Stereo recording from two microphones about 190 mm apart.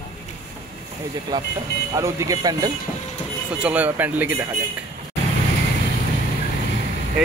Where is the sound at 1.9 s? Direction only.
15° right (ahead or behind).